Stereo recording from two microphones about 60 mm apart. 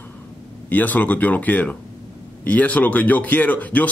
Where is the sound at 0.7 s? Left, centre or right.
Left.